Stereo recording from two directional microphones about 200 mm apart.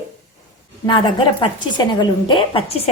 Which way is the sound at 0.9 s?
25° left (ahead or behind).